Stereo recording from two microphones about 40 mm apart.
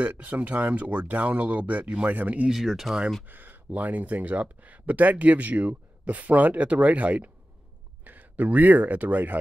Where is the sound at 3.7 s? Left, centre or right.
Right.